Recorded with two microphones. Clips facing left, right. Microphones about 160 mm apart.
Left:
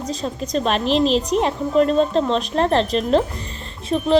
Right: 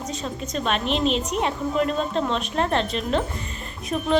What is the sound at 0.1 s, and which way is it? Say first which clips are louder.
Speech: left 8 dB; 35° left (ahead or behind).